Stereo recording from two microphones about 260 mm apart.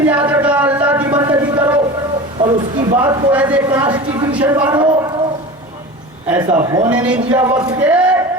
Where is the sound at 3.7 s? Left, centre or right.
Centre.